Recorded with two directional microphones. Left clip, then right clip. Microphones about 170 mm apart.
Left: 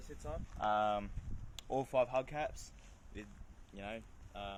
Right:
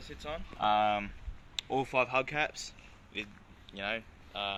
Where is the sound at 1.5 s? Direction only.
45° left (ahead or behind).